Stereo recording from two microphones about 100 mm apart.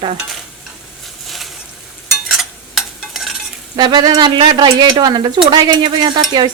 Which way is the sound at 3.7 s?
50° right (ahead or behind).